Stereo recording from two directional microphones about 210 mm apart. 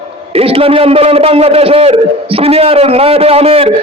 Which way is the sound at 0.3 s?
25° right (ahead or behind).